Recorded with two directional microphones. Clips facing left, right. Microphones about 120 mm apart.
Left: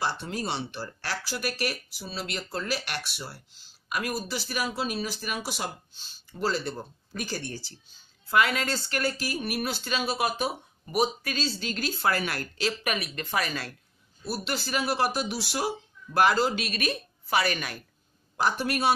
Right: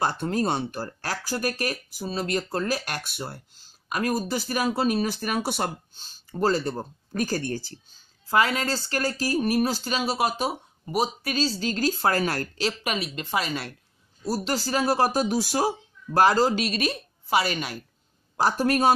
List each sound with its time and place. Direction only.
0.0 s speech: 50° right (ahead or behind)
8.3 s speech: 30° right (ahead or behind)
14.4 s speech: 35° right (ahead or behind)
18.3 s speech: 40° right (ahead or behind)